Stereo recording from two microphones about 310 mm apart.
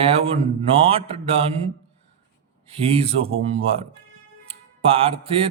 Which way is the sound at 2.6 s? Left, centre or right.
Centre.